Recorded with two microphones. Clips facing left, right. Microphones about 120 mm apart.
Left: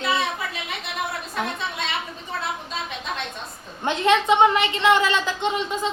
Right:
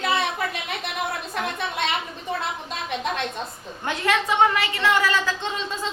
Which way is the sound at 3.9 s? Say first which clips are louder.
Left 5 dB; 20° left (ahead or behind).